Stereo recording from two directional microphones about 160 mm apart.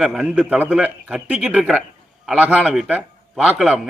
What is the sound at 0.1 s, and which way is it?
A man's voice, 5° right (ahead or behind).